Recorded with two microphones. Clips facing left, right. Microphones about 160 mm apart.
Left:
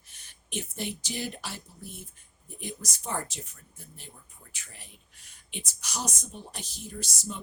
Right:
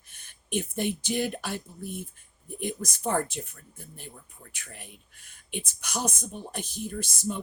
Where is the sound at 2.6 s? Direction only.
55° right (ahead or behind).